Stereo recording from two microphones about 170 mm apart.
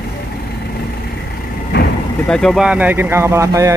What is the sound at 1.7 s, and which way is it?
Vehicle, 80° left.